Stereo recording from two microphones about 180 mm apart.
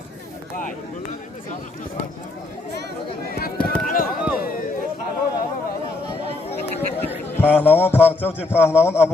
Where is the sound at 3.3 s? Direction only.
55° left (ahead or behind).